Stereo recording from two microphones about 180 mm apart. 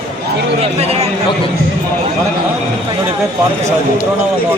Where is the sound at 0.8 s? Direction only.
35° right (ahead or behind).